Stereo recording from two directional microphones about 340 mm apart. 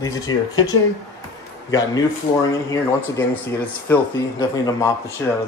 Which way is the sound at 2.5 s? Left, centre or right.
Centre.